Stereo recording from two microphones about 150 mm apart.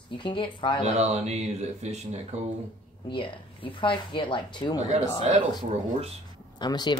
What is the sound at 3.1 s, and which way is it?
Speech, 35° left (ahead or behind).